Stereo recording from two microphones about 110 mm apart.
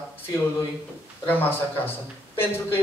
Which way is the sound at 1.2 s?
20° left (ahead or behind).